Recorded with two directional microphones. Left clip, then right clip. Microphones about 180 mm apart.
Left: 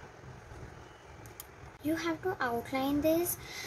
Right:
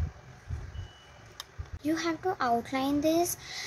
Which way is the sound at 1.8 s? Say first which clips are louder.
Right 3 dB; 20° right (ahead or behind).